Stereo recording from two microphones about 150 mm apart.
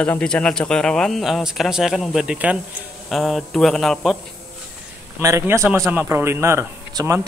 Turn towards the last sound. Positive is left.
turn(degrees=-20)  # may be behind; listen again after turning